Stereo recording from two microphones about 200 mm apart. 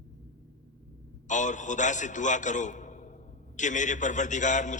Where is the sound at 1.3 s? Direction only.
40° left (ahead or behind).